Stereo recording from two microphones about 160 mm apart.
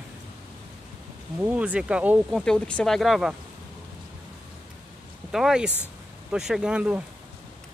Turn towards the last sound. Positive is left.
turn(degrees=-5)  # may be behind; listen again after turning